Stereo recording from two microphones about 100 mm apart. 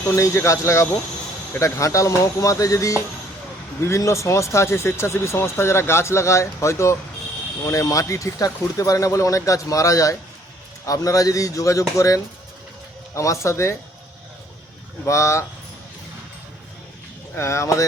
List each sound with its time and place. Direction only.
0.2 s speech: 30° left (ahead or behind)
15.0 s speech: 30° left (ahead or behind)
17.3 s speech: 30° left (ahead or behind)